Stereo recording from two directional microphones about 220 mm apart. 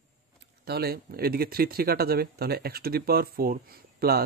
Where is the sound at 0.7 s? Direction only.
45° right (ahead or behind).